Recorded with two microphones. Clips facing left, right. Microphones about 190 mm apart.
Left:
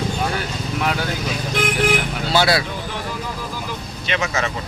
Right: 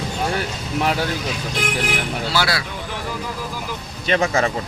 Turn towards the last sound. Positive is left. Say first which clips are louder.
# right 4 dB
turn(degrees=-35)  # may be behind; listen again after turning